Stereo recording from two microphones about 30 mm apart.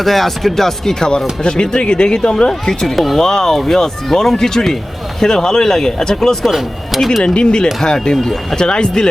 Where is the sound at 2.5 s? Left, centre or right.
Centre.